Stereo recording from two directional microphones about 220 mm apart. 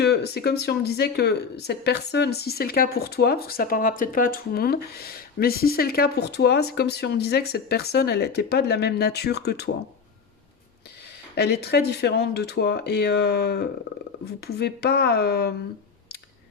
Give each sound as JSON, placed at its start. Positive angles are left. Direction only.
{"t": 0.0, "sound": "speech", "side_deg": 45}
{"t": 11.3, "sound": "speech", "side_deg": 50}